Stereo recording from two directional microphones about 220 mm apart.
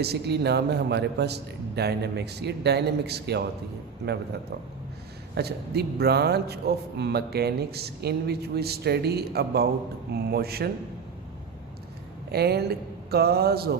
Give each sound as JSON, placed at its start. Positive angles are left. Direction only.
{"t": 0.0, "sound": "a man's voice", "side_deg": -50}
{"t": 5.3, "sound": "a man's voice", "side_deg": -45}
{"t": 12.3, "sound": "a man's voice", "side_deg": -45}